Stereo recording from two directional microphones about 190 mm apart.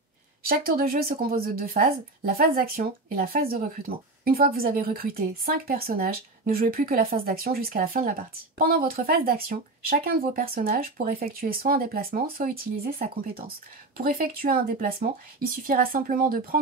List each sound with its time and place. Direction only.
0.5 s a woman's voice: 50° right (ahead or behind)